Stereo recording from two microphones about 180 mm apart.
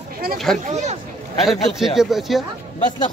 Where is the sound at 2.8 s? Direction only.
25° left (ahead or behind).